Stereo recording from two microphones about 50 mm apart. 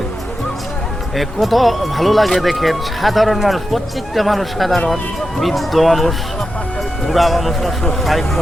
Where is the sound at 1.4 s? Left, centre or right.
Centre.